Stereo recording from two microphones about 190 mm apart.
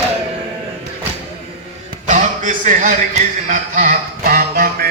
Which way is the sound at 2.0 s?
40° right (ahead or behind).